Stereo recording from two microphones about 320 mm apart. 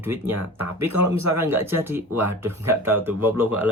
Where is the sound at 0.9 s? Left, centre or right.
Right.